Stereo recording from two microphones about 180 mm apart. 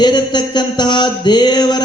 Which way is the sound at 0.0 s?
25° left (ahead or behind).